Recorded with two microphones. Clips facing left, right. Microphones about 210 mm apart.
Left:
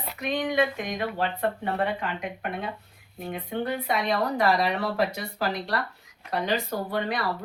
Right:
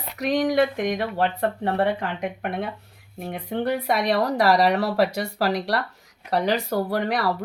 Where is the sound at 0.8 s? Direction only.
65° right (ahead or behind).